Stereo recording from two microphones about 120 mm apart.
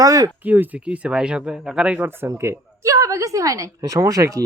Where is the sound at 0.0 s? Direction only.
30° right (ahead or behind).